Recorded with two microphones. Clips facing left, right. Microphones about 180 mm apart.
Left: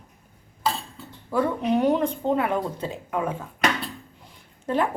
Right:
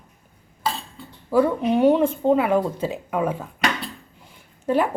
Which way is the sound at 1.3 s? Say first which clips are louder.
Right 4 dB; 5° right (ahead or behind).